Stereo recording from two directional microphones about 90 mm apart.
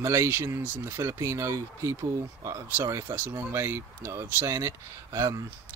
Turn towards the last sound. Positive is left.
turn(degrees=-35)  # may be behind; listen again after turning